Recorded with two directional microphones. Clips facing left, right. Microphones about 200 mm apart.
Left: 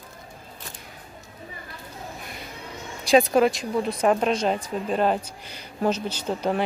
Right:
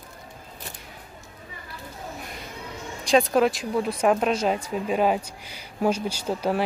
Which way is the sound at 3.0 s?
5° left (ahead or behind).